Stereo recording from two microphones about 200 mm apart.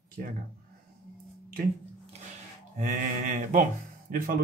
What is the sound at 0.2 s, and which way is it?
Speech, 45° right (ahead or behind).